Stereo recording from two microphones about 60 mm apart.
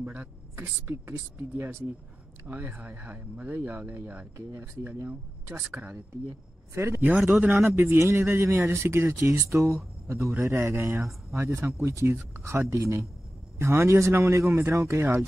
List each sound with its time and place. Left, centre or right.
0.0 s a woman's voice: right
0.7 s speech: right
2.4 s speech: right
5.7 s speech: right
6.7 s speech: right
7.2 s a man's voice: right
12.2 s a man's voice: right